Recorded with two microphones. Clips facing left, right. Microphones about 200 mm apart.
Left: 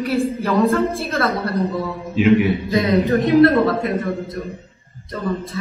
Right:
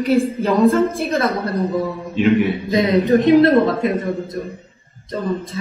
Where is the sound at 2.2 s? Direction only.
Centre (ahead or behind).